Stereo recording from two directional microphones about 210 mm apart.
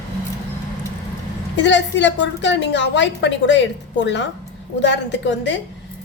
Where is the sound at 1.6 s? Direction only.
60° left (ahead or behind).